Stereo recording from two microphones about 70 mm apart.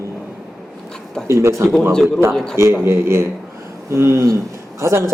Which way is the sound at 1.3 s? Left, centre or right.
Right.